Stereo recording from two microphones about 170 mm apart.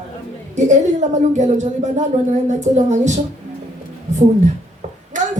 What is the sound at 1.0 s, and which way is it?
Speech, 45° right (ahead or behind).